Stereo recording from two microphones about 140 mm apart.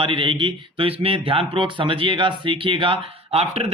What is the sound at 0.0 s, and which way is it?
A man's voice, 40° right (ahead or behind).